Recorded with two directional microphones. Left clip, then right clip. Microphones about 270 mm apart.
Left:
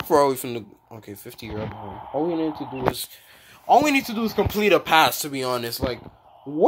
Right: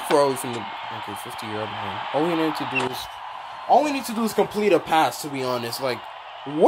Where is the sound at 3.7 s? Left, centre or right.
Centre.